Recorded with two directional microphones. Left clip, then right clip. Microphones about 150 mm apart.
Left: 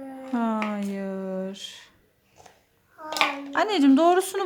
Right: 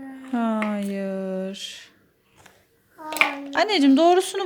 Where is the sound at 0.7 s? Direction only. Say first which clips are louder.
Right 3 dB; 20° right (ahead or behind).